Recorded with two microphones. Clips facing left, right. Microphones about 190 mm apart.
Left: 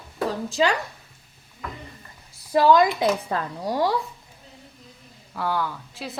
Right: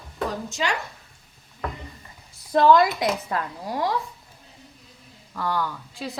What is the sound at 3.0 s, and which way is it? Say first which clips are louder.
Speech: left 2 dB; 30° left (ahead or behind).